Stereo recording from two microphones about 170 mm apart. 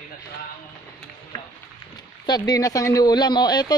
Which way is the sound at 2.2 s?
25° left (ahead or behind).